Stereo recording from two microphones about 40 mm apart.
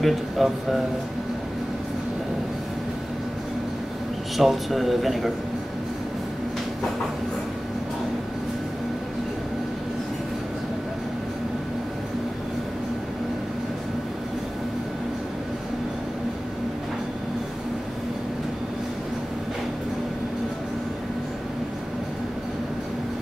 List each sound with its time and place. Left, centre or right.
0.0 s speech: centre
4.4 s speech: centre